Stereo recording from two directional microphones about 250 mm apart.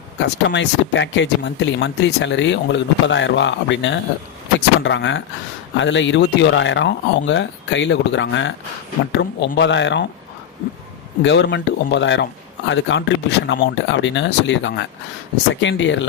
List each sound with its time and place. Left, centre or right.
0.2 s speech: left
11.2 s speech: left